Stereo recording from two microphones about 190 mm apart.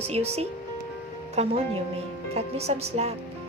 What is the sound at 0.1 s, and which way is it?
A woman's voice, 35° right (ahead or behind).